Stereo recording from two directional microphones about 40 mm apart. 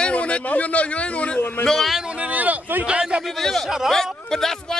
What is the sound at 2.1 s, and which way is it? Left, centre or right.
Speech, right.